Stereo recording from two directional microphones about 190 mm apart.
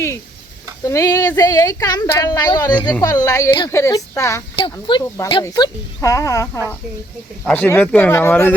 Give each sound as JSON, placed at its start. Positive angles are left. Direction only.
{"t": 0.9, "sound": "a woman's voice", "side_deg": 15}
{"t": 4.5, "sound": "a woman's voice", "side_deg": 25}